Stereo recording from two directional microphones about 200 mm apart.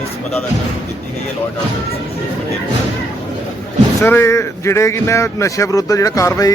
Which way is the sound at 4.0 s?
10° left (ahead or behind).